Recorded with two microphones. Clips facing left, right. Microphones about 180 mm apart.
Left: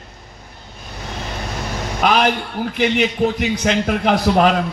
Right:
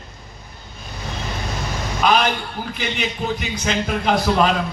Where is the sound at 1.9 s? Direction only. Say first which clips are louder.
Left 2 dB; 60° left (ahead or behind).